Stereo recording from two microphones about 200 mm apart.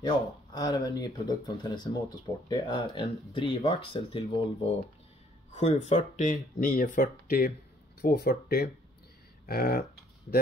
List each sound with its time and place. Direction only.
0.0 s speech: 20° left (ahead or behind)
5.5 s speech: 35° left (ahead or behind); by 9.8 s 50° left (ahead or behind)